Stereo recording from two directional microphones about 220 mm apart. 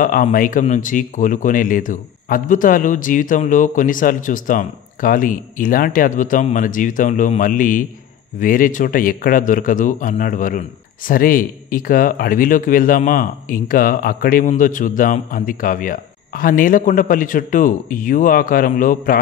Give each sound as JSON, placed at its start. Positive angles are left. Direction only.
{"t": 0.0, "sound": "speech", "side_deg": 40}